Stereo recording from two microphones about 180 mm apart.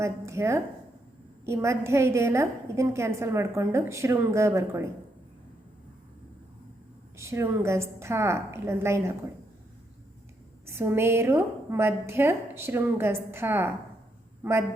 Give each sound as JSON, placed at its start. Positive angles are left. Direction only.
{"t": 0.0, "sound": "a woman's voice", "side_deg": -15}
{"t": 7.2, "sound": "a woman's voice", "side_deg": -15}
{"t": 10.8, "sound": "a woman's voice", "side_deg": -15}